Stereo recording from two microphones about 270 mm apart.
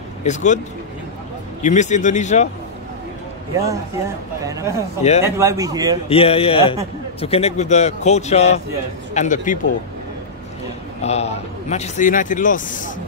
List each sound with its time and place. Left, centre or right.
0.2 s speech: left
1.6 s a man's voice: left
3.5 s speech: centre
6.0 s a man's voice: left
11.0 s a man's voice: left